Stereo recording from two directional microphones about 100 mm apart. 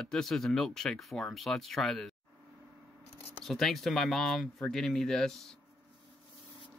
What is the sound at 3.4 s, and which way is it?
Speech, centre (ahead or behind).